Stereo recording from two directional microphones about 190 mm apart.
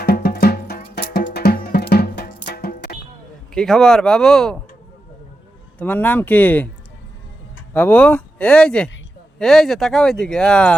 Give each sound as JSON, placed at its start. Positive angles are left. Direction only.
{"t": 0.0, "sound": "music", "side_deg": 55}
{"t": 3.5, "sound": "speech", "side_deg": 5}
{"t": 5.8, "sound": "speech", "side_deg": 10}
{"t": 7.7, "sound": "speech", "side_deg": 10}